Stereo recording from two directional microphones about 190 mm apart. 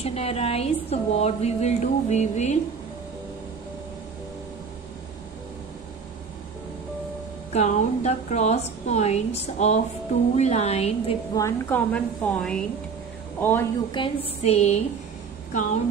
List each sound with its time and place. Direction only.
0.0 s a woman's voice: 30° left (ahead or behind)
7.5 s a woman's voice: 35° left (ahead or behind)
11.3 s a woman's voice: 15° left (ahead or behind)
13.9 s a woman's voice: 30° left (ahead or behind)